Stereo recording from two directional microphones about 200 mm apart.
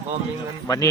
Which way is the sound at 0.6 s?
15° left (ahead or behind).